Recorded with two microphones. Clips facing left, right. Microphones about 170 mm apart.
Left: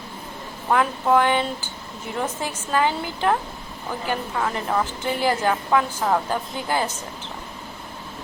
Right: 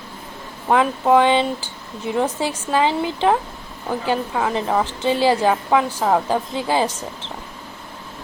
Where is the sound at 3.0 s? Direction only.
25° right (ahead or behind).